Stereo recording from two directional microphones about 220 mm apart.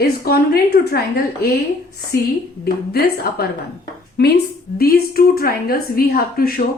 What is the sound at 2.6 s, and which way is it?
Speech, 45° left (ahead or behind).